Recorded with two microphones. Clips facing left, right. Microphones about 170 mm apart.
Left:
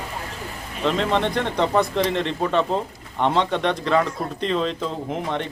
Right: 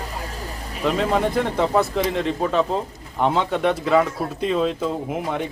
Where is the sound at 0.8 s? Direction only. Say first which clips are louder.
Right 1 dB; 5° right (ahead or behind).